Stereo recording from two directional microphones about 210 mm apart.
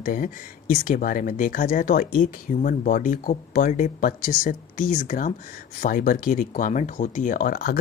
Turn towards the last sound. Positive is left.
turn(degrees=45)  # may be behind; listen again after turning